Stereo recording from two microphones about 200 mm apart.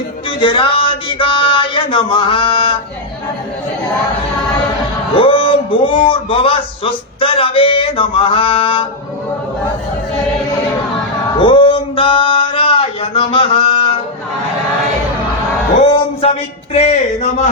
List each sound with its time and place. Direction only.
0.3 s a man's voice: 25° left (ahead or behind)
5.1 s a man's voice: 25° left (ahead or behind)
11.3 s a man's voice: 25° left (ahead or behind)
16.7 s speech: 35° left (ahead or behind)